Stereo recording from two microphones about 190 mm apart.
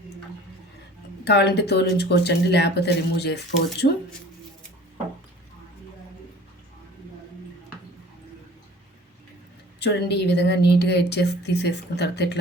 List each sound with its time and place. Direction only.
1.2 s speech: 60° left (ahead or behind)
9.8 s speech: 65° left (ahead or behind)